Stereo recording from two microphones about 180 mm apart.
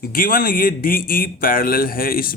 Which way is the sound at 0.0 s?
55° left (ahead or behind).